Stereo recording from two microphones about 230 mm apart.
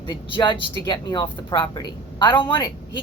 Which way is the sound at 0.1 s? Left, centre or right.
Centre.